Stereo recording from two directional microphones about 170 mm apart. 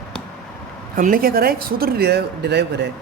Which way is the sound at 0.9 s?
55° right (ahead or behind).